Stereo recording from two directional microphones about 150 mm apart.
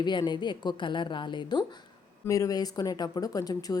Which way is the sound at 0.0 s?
30° left (ahead or behind).